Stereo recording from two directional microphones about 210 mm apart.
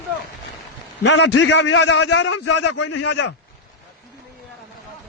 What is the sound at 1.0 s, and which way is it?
A man's voice, 55° left (ahead or behind).